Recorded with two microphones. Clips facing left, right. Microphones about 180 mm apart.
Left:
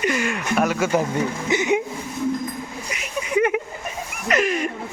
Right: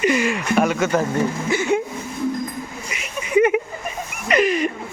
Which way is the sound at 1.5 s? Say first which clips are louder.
Left 1 dB; 20° left (ahead or behind).